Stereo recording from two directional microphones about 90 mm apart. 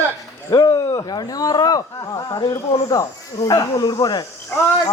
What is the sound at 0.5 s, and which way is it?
Speech, 45° left (ahead or behind).